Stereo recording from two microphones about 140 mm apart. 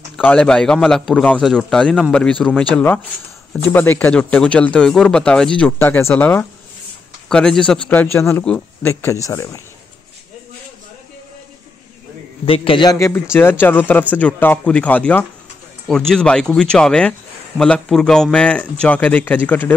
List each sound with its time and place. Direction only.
0.2 s a man's voice: 10° left (ahead or behind)
7.2 s a man's voice: 5° left (ahead or behind); by 9.6 s 20° left (ahead or behind)
12.4 s a man's voice: 40° left (ahead or behind)
13.0 s a man's voice: 15° left (ahead or behind)